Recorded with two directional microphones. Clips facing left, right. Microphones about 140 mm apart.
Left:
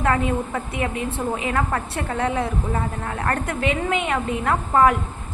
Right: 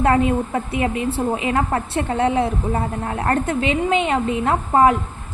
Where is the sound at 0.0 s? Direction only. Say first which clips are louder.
Right 4 dB; 30° right (ahead or behind).